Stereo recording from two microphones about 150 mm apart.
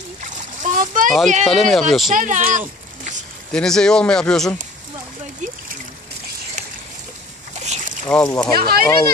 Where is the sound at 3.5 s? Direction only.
5° left (ahead or behind).